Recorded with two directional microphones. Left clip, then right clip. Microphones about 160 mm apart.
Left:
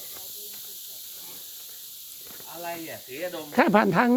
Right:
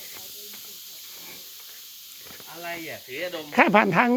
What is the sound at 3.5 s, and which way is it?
Speech, 20° left (ahead or behind).